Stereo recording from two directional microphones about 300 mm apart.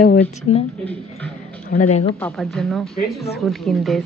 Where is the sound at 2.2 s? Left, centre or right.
Centre.